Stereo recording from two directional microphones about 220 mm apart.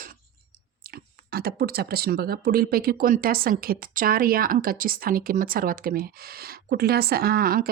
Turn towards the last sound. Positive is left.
turn(degrees=-40)  # may be behind; listen again after turning